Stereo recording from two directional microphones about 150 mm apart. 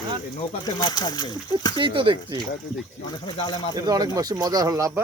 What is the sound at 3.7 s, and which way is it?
Speech, 25° right (ahead or behind).